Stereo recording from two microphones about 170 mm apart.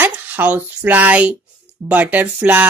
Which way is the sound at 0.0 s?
10° right (ahead or behind).